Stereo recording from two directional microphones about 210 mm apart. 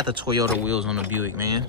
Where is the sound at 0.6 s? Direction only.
5° right (ahead or behind).